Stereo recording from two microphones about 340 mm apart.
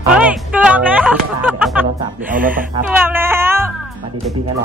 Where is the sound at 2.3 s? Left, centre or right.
Right.